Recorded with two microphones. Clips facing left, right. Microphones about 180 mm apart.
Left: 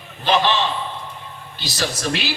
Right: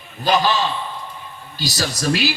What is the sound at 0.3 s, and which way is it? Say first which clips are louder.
A man's voice: even; 40° right (ahead or behind).